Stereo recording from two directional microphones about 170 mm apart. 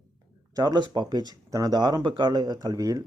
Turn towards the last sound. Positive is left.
turn(degrees=-20)  # may be behind; listen again after turning